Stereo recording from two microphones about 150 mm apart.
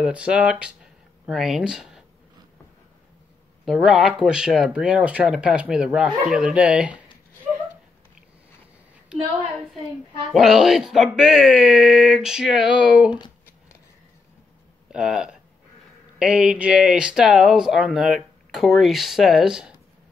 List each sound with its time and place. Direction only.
0.0 s speech: 5° right (ahead or behind)
3.6 s speech: centre (ahead or behind)
10.3 s speech: centre (ahead or behind)
13.1 s shuffling cards: 30° left (ahead or behind)
14.9 s speech: 5° right (ahead or behind)